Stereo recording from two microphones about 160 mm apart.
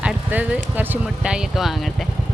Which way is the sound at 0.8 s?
10° right (ahead or behind).